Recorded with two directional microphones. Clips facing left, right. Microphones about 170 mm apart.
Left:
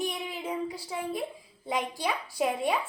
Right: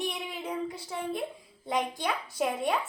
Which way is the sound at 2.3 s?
Centre (ahead or behind).